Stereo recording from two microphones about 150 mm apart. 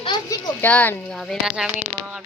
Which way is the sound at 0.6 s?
10° left (ahead or behind).